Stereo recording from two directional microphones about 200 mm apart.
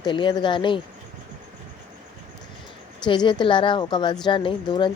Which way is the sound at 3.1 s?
25° left (ahead or behind).